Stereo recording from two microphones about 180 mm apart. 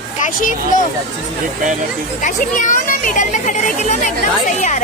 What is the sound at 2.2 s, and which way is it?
A woman's voice, 45° left (ahead or behind).